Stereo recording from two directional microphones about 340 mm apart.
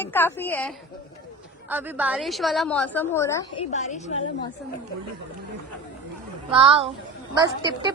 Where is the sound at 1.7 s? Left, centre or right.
Centre.